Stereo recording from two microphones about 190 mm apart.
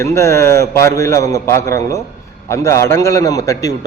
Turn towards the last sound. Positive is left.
turn(degrees=15)  # may be behind; listen again after turning